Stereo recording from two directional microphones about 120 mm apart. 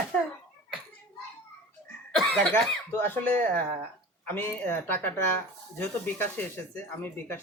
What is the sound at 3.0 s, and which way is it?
Speech, 15° left (ahead or behind).